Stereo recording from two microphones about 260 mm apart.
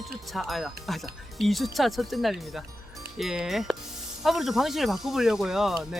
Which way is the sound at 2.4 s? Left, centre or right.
Centre.